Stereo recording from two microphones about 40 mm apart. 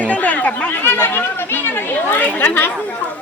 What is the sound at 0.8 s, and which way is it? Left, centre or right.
Speech, left.